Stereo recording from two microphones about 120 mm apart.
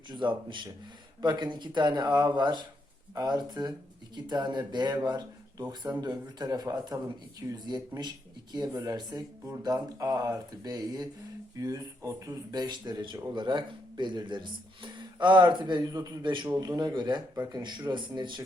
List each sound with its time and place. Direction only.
0.1 s speech: 40° right (ahead or behind)